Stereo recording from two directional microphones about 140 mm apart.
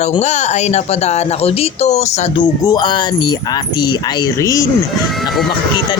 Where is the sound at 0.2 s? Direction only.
55° left (ahead or behind).